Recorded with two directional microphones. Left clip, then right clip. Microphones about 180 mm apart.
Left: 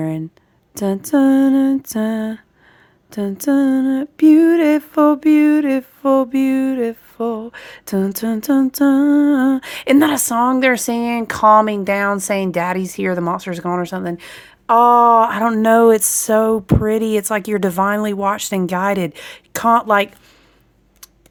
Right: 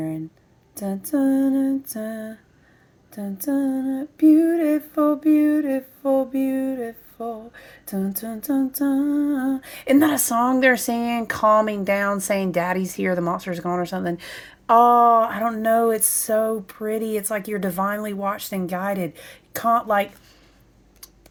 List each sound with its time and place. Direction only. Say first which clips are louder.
0.7 s a sound: left 8 dB; 40° left (ahead or behind)
3.1 s humming: left 8 dB; 45° left (ahead or behind)
9.8 s speech: left 4 dB; 25° left (ahead or behind)